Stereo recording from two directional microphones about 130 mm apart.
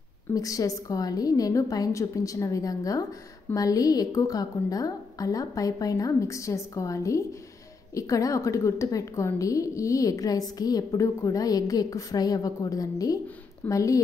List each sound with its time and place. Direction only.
0.3 s a woman's voice: 25° left (ahead or behind)